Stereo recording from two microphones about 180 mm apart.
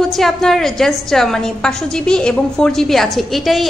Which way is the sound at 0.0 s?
Centre (ahead or behind).